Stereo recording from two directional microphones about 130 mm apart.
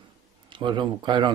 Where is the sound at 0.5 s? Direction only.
40° right (ahead or behind).